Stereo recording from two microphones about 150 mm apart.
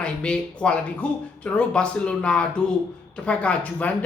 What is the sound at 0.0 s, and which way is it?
Speech, 5° left (ahead or behind).